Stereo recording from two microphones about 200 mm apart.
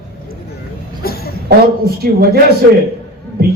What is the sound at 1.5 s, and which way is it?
Speech, 50° right (ahead or behind).